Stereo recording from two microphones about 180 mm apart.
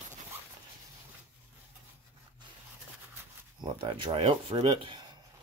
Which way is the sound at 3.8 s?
30° right (ahead or behind).